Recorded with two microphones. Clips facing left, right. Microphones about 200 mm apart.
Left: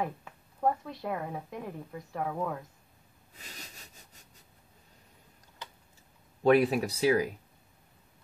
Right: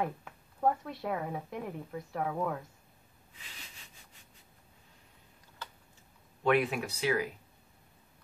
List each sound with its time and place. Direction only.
0.0 s a woman's voice: centre (ahead or behind)
3.3 s sniff: 40° left (ahead or behind)
6.4 s speech: 35° left (ahead or behind)